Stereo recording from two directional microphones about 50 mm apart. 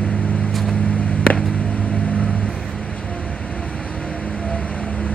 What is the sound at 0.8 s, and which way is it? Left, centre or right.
Vehicle, left.